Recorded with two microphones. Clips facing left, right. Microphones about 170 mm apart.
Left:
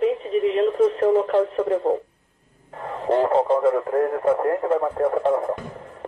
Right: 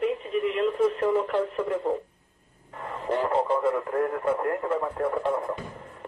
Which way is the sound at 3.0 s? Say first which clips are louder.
Left 6 dB; 35° left (ahead or behind).